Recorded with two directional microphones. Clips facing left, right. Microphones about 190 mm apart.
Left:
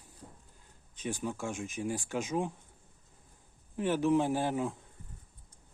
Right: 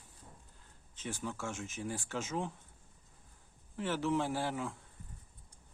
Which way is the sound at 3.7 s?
15° left (ahead or behind).